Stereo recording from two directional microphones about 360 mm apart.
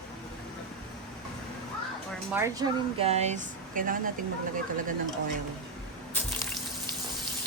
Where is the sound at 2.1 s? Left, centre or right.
Centre; by 4.0 s right.